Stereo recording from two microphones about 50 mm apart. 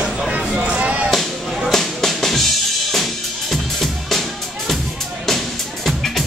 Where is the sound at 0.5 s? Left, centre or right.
Right.